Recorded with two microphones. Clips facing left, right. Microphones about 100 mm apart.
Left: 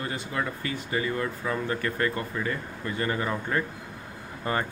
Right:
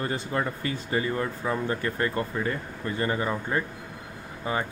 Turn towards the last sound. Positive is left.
turn(degrees=-10)  # may be behind; listen again after turning